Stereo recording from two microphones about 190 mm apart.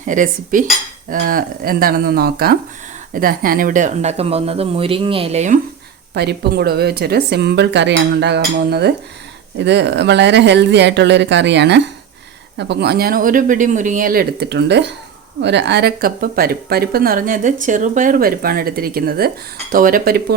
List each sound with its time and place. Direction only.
0.0 s speech: 45° right (ahead or behind)
6.1 s a woman's voice: 60° right (ahead or behind)